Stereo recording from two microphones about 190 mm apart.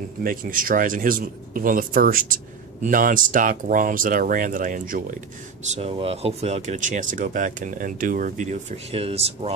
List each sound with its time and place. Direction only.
0.2 s speech: 50° right (ahead or behind)
5.8 s speech: 30° right (ahead or behind)